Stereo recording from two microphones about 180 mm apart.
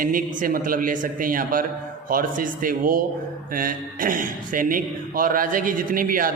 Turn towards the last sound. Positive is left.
turn(degrees=-50)  # may be behind; listen again after turning